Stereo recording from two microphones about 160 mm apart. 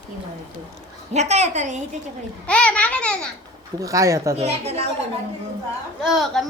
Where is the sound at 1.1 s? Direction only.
45° right (ahead or behind).